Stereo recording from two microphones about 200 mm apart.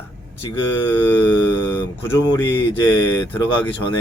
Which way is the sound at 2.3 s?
25° left (ahead or behind).